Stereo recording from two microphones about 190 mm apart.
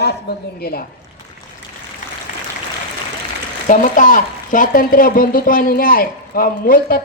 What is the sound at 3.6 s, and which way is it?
A woman's voice, 45° left (ahead or behind).